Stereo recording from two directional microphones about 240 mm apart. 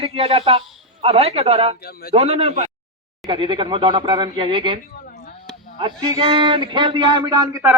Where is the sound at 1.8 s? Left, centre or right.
Left.